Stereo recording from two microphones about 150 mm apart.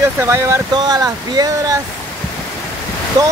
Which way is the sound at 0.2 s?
20° right (ahead or behind).